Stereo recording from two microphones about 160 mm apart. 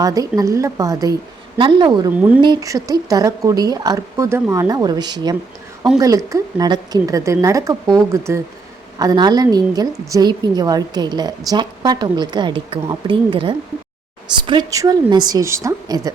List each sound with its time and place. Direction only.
0.0 s a woman's voice: 20° right (ahead or behind)
2.1 s speech: 10° right (ahead or behind)
2.4 s a woman's voice: 25° right (ahead or behind)